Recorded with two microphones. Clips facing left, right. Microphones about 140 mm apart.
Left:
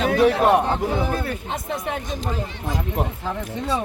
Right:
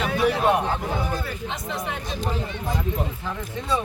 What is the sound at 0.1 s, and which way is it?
A man's voice, 70° left (ahead or behind).